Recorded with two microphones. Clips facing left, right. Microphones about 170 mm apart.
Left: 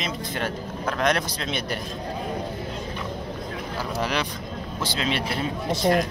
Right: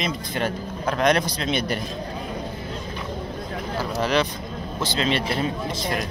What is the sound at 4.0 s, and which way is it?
Speech, 10° left (ahead or behind).